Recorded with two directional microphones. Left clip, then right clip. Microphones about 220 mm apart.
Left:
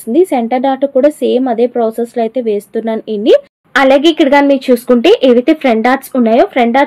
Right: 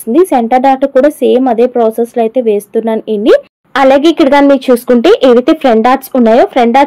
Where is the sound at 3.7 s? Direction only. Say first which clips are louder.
Right 2 dB; 20° right (ahead or behind).